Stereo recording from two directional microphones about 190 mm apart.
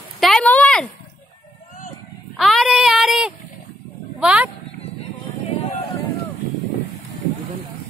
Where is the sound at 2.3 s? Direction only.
Centre (ahead or behind).